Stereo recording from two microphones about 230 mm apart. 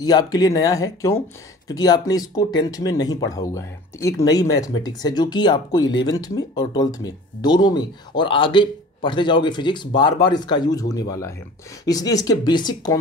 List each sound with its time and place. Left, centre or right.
0.0 s speech: centre